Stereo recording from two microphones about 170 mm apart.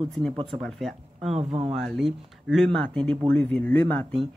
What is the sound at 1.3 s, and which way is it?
Speech, 35° right (ahead or behind).